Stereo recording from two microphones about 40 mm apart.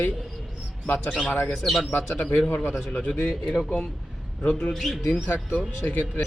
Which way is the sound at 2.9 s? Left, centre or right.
Left.